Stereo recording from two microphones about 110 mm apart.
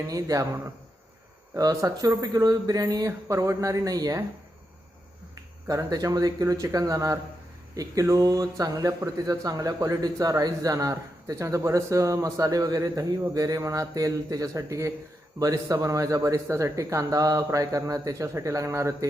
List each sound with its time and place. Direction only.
0.1 s speech: 30° right (ahead or behind)
5.3 s speech: 35° right (ahead or behind)